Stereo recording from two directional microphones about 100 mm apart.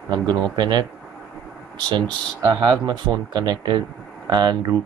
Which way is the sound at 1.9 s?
45° right (ahead or behind).